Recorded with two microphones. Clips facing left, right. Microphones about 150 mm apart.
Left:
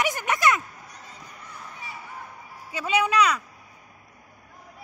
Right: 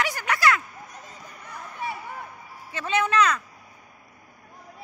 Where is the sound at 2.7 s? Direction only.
10° left (ahead or behind).